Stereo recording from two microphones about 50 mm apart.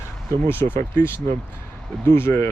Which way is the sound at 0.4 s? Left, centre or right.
Left.